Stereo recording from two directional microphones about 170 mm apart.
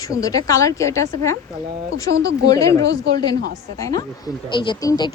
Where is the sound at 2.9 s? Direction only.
70° right (ahead or behind).